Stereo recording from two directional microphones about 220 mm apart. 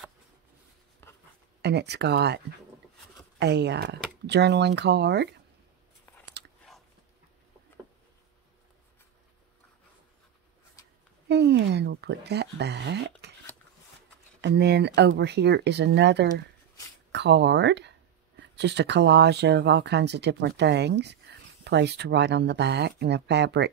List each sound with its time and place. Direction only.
1.6 s speech: 50° right (ahead or behind)
11.2 s speech: 50° right (ahead or behind)
14.4 s speech: 50° right (ahead or behind)